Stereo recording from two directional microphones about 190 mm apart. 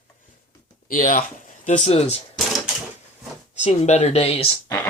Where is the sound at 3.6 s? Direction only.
35° left (ahead or behind).